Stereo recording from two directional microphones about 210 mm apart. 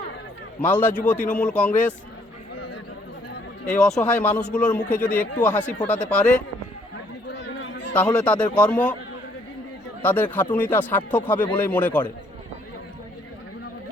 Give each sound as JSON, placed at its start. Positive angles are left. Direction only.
{"t": 0.6, "sound": "speech", "side_deg": 5}
{"t": 3.8, "sound": "speech", "side_deg": 0}
{"t": 7.4, "sound": "chatter", "side_deg": 60}
{"t": 7.9, "sound": "speech", "side_deg": 5}
{"t": 10.0, "sound": "speech", "side_deg": 10}